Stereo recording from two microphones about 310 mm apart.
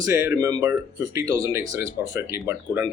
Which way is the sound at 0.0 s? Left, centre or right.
Centre.